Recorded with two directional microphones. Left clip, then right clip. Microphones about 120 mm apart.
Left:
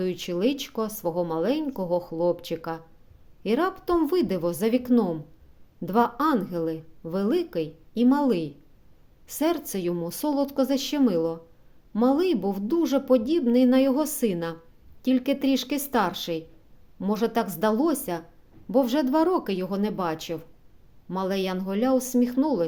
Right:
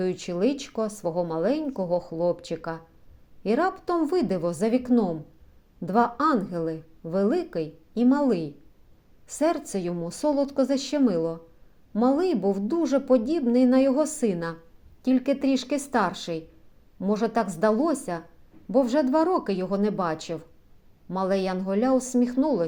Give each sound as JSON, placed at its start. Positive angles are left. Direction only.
{"t": 0.0, "sound": "a woman's voice", "side_deg": 20}